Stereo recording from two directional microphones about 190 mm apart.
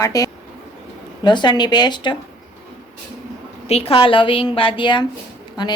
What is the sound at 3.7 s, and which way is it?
A woman's voice, 30° left (ahead or behind).